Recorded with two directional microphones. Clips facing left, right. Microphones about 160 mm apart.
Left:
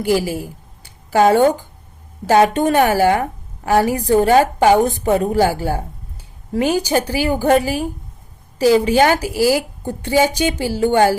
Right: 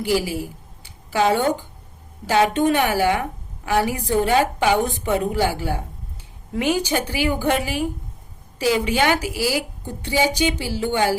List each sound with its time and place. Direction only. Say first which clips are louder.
0.0 s a woman's voice: left 4 dB; 45° left (ahead or behind)